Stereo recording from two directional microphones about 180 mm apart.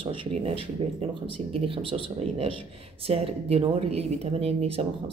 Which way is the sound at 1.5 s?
30° right (ahead or behind).